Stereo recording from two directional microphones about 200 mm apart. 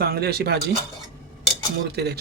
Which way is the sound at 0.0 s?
50° right (ahead or behind).